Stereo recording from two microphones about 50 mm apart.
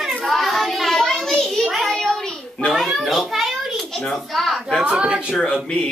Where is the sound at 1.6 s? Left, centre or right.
Centre.